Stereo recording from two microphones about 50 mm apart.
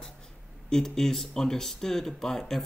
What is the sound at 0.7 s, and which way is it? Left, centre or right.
Speech, centre.